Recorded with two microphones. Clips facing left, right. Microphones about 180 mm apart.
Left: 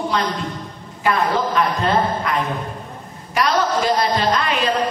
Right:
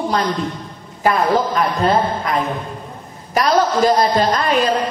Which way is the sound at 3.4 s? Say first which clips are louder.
Right 4 dB; 40° right (ahead or behind).